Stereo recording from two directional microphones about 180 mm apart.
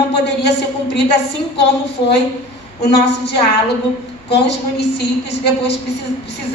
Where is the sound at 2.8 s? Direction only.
65° left (ahead or behind).